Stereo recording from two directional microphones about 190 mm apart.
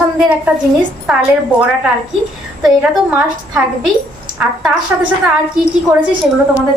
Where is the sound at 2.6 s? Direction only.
5° right (ahead or behind).